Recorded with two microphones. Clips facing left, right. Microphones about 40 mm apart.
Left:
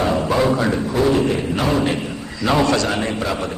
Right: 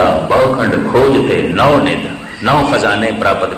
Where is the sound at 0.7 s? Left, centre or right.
Right.